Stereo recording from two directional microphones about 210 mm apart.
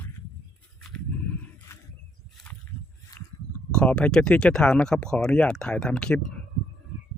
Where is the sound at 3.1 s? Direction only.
20° left (ahead or behind).